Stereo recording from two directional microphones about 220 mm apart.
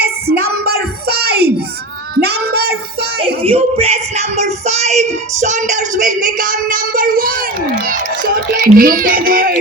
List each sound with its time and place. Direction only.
0.0 s child singing: 45° right (ahead or behind)
3.4 s music: 25° right (ahead or behind)
8.5 s speech: 40° right (ahead or behind)